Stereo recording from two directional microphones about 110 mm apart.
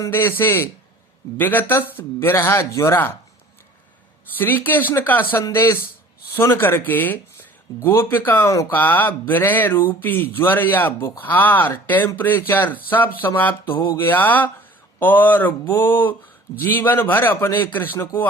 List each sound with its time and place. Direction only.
0.0 s a man's voice: 20° left (ahead or behind)
4.4 s a man's voice: 20° left (ahead or behind)
13.7 s mantra: 45° left (ahead or behind)
13.9 s a man's voice: 20° left (ahead or behind)